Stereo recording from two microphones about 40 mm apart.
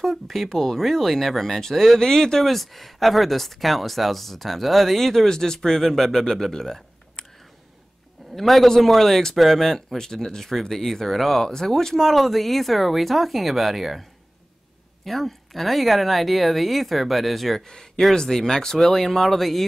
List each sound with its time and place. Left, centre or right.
0.0 s speech: centre
8.4 s speech: centre
15.0 s speech: centre
17.6 s speech: centre